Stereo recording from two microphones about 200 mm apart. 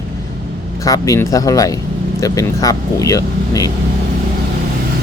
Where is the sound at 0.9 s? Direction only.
15° left (ahead or behind).